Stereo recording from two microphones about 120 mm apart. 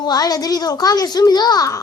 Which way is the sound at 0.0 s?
35° left (ahead or behind).